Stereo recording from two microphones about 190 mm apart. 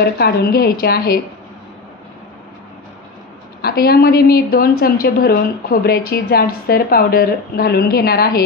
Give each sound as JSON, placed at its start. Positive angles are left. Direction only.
{"t": 0.0, "sound": "a woman's voice", "side_deg": 55}
{"t": 3.6, "sound": "a woman's voice", "side_deg": 55}